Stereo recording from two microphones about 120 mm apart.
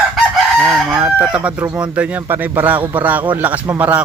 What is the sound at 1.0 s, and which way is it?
Speech, 10° right (ahead or behind).